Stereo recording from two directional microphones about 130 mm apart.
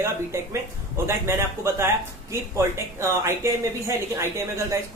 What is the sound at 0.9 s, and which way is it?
Speech, 20° right (ahead or behind).